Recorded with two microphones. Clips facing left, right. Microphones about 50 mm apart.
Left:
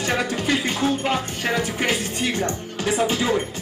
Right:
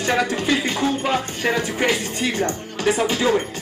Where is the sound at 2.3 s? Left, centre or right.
Right.